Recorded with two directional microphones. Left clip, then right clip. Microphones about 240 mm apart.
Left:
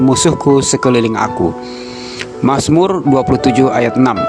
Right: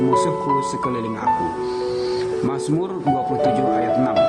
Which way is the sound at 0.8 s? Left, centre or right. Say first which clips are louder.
Left 11 dB; left.